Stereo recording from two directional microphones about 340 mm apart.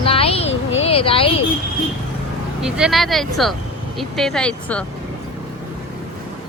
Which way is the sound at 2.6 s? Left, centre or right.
Centre.